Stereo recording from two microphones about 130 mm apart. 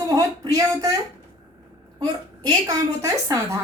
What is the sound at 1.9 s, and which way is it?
A man's voice, 30° right (ahead or behind).